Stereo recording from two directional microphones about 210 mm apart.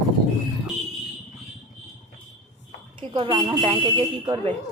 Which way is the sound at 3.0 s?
25° right (ahead or behind).